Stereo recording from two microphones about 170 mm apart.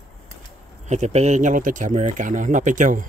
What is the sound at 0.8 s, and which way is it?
Speech, 40° right (ahead or behind).